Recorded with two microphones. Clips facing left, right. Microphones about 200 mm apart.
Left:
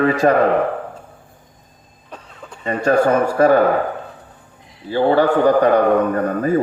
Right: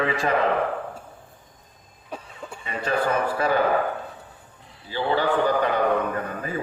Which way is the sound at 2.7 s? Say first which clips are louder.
Left 9 dB; 45° left (ahead or behind).